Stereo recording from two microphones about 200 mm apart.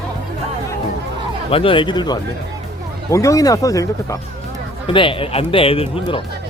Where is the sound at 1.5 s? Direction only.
25° left (ahead or behind).